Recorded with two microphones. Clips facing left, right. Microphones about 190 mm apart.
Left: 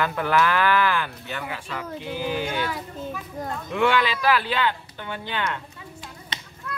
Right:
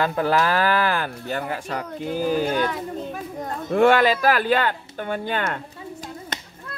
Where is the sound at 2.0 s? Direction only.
45° right (ahead or behind).